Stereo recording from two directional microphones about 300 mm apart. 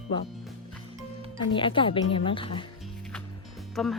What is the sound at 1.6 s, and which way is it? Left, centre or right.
Speech, centre.